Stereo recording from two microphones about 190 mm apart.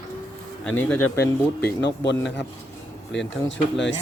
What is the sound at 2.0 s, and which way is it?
Speech, 65° left (ahead or behind).